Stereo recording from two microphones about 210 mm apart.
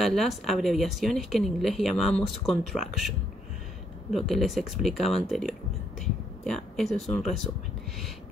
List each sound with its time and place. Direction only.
0.0 s speech: centre (ahead or behind)